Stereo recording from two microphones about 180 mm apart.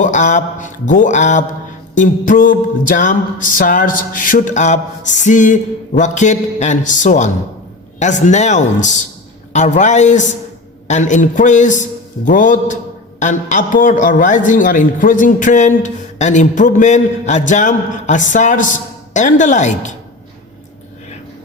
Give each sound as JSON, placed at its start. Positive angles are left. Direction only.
{"t": 0.0, "sound": "a man's voice", "side_deg": 45}